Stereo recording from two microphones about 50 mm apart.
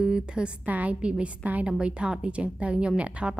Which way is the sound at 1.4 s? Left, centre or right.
Right.